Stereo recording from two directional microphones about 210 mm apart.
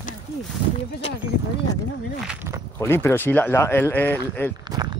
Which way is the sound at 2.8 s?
10° left (ahead or behind).